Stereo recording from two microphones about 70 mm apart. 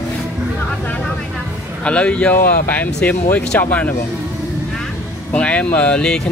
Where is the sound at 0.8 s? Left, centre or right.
Left.